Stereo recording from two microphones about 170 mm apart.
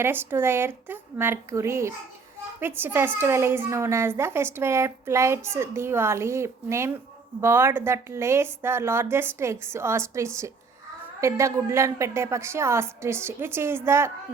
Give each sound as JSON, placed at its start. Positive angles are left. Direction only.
{"t": 0.0, "sound": "a woman's voice", "side_deg": -15}